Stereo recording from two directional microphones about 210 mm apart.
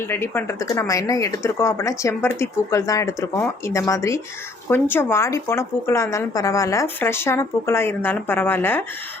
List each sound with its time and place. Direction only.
0.0 s speech: 10° left (ahead or behind)